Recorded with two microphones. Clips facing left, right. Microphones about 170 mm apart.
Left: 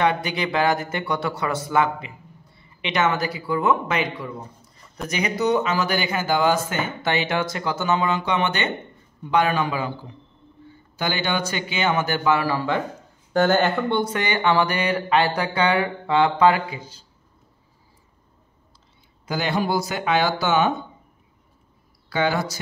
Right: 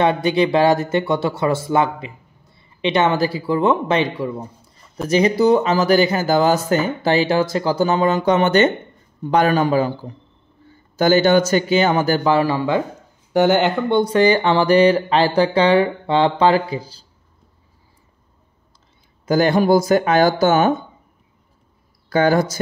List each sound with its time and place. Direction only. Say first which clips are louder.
0.0 s speech: right 6 dB; 25° right (ahead or behind)
14.1 s speech: right 8 dB; 30° right (ahead or behind)
19.2 s speech: right 9 dB; 45° right (ahead or behind)
22.1 s speech: right 7 dB; 45° right (ahead or behind)